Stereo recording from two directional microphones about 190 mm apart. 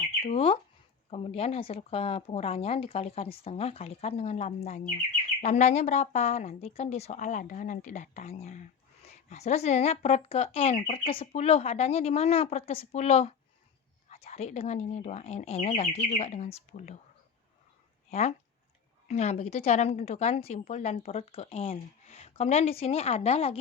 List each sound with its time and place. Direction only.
0.3 s a woman's voice: 30° left (ahead or behind)
18.1 s a woman's voice: 35° left (ahead or behind)